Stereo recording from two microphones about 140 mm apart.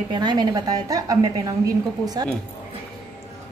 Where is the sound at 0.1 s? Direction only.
30° right (ahead or behind).